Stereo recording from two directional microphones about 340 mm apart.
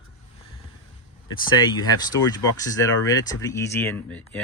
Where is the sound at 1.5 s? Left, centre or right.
Centre.